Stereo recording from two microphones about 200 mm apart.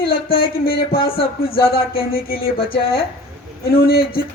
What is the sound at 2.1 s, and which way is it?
Speech, 50° left (ahead or behind).